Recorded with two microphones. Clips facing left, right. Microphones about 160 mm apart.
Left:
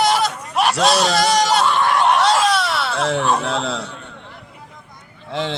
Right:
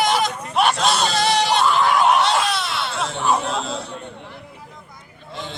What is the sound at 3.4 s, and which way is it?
Speech, 70° left (ahead or behind).